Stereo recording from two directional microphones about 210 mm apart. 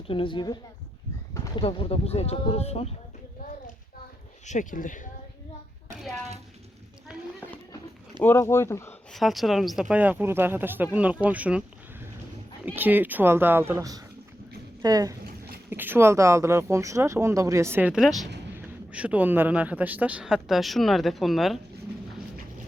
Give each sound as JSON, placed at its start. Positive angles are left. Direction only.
{"t": 0.1, "sound": "speech", "side_deg": 25}
{"t": 4.4, "sound": "speech", "side_deg": 40}
{"t": 7.1, "sound": "a sound", "side_deg": -5}
{"t": 8.2, "sound": "speech", "side_deg": 10}
{"t": 9.1, "sound": "a man's voice", "side_deg": 0}